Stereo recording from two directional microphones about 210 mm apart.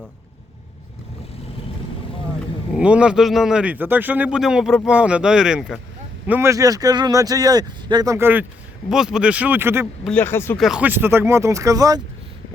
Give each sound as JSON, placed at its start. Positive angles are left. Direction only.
{"t": 2.7, "sound": "a man's voice", "side_deg": -5}
{"t": 10.1, "sound": "speech", "side_deg": 10}
{"t": 10.6, "sound": "speech", "side_deg": -5}